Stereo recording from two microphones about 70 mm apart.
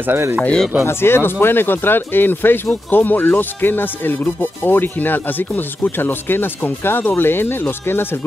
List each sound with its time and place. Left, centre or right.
0.0 s speech: right
0.4 s speech: centre
0.8 s speech: left